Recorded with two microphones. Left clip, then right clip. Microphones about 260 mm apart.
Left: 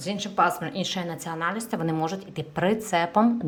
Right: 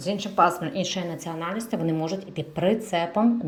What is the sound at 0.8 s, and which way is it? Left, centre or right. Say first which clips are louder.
Speech: right 1 dB; left.